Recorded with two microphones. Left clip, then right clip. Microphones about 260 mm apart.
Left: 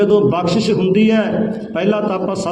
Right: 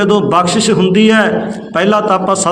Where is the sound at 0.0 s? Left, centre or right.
Right.